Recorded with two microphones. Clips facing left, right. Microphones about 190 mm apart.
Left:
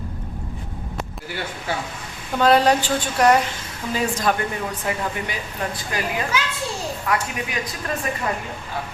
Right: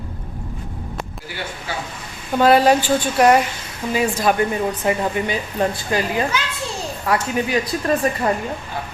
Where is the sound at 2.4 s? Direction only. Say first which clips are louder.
Right 3 dB; 5° right (ahead or behind).